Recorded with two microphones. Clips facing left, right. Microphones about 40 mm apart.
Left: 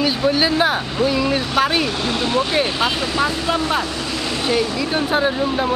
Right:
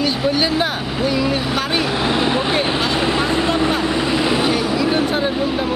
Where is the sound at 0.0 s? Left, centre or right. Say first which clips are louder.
Left 1 dB; centre.